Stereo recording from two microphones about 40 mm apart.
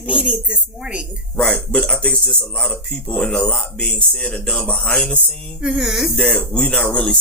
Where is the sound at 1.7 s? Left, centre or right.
Left.